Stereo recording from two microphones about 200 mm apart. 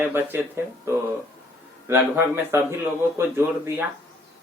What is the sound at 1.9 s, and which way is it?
Speech, 10° right (ahead or behind).